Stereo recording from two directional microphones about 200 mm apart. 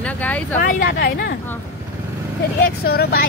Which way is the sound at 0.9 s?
50° left (ahead or behind).